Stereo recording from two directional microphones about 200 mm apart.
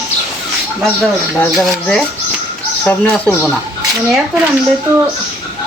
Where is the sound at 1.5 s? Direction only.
5° left (ahead or behind).